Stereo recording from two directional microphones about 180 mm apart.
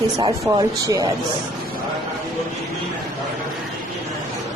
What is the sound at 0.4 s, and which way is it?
Speech, 20° right (ahead or behind).